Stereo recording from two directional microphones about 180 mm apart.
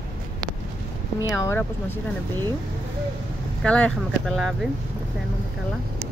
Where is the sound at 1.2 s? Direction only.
20° left (ahead or behind).